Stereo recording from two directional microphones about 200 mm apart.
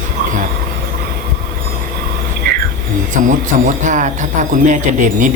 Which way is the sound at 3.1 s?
40° right (ahead or behind).